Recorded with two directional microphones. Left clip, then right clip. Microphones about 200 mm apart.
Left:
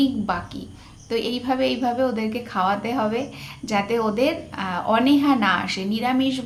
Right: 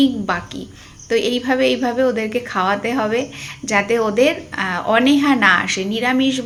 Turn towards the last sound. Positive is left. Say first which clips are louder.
# right 5 dB
turn(degrees=-10)  # may be behind; listen again after turning